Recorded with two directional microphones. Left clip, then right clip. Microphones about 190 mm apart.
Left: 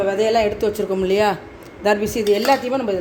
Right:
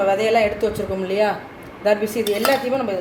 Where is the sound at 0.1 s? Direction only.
45° left (ahead or behind).